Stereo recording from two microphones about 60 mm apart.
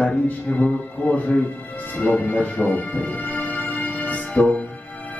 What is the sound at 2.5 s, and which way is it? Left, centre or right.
Music, left.